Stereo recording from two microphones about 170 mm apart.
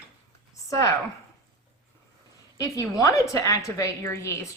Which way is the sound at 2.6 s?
20° left (ahead or behind).